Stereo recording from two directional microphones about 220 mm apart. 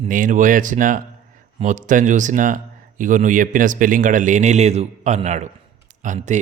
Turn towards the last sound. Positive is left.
turn(degrees=-35)  # may be behind; listen again after turning